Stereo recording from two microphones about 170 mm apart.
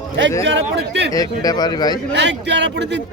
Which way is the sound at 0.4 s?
90° right.